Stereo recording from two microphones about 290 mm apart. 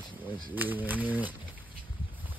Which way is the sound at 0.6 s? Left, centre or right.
Centre.